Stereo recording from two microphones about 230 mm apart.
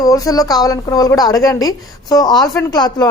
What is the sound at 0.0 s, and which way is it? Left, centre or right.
A woman's voice, centre.